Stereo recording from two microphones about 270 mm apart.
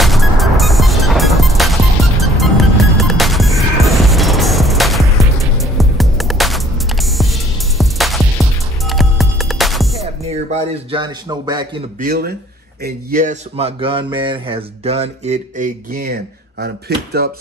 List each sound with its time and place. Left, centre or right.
0.0 s music: centre
10.3 s speech: right
12.0 s speech: right